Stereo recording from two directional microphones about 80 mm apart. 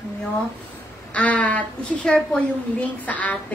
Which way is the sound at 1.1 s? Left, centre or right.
Centre.